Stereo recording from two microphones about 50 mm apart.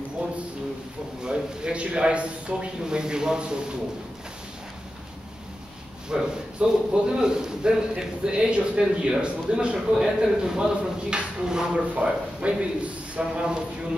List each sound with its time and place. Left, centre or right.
1.2 s a man's voice: centre
6.0 s a man's voice: centre